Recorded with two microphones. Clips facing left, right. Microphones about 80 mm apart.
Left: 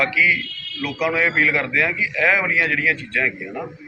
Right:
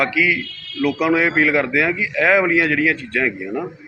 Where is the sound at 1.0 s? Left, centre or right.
Centre.